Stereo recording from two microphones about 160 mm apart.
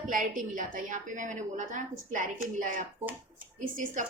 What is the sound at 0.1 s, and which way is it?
A woman's voice, 55° right (ahead or behind).